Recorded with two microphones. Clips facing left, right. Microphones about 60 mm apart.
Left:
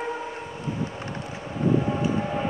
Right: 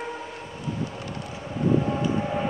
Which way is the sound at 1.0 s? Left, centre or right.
Left.